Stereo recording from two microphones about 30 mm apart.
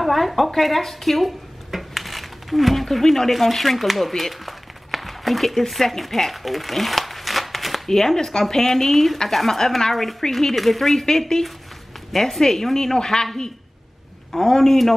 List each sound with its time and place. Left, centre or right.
0.0 s speech: centre
4.2 s a sound: centre
7.9 s a woman's voice: centre
10.5 s a woman's voice: centre